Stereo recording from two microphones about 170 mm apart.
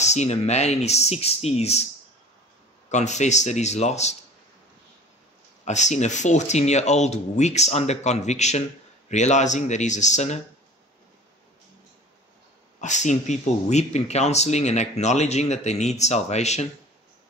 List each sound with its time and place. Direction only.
0.0 s speech: 40° left (ahead or behind)
2.9 s speech: 45° left (ahead or behind)
5.7 s speech: 45° left (ahead or behind)
12.8 s speech: 45° left (ahead or behind)